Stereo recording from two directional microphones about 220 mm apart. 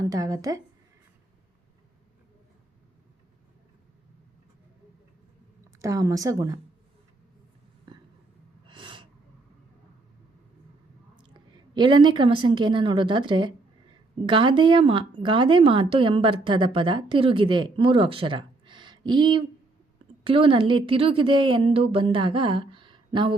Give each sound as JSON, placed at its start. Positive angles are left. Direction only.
{"t": 0.0, "sound": "a woman's voice", "side_deg": -15}
{"t": 5.8, "sound": "a woman's voice", "side_deg": -15}
{"t": 8.6, "sound": "snort", "side_deg": -20}
{"t": 11.2, "sound": "a woman's voice", "side_deg": -20}
{"t": 22.7, "sound": "a sound", "side_deg": -20}